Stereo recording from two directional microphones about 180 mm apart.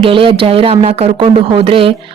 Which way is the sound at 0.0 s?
30° right (ahead or behind).